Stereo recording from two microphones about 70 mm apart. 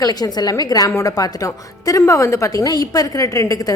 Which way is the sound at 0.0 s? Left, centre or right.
Left.